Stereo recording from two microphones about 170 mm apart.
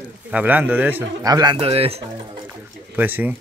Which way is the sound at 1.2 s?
25° right (ahead or behind).